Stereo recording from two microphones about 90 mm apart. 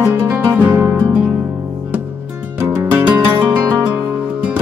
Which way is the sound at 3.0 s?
20° right (ahead or behind).